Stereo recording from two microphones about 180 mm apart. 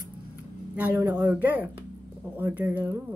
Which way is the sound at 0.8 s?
15° right (ahead or behind).